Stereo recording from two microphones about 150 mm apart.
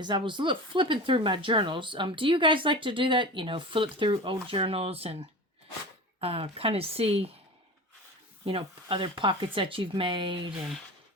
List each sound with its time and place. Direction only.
0.0 s speech: 30° right (ahead or behind)
6.1 s speech: 40° right (ahead or behind)
8.4 s speech: 35° right (ahead or behind)